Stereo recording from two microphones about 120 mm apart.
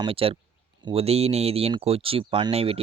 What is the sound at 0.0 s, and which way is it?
Speech, 50° right (ahead or behind).